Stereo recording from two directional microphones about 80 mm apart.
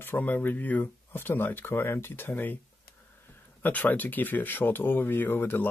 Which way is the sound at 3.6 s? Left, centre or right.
Left.